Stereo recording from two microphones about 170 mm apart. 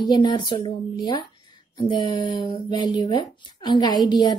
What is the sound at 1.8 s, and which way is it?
A woman's voice, 30° left (ahead or behind).